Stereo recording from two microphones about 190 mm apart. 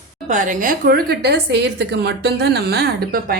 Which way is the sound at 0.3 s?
40° right (ahead or behind).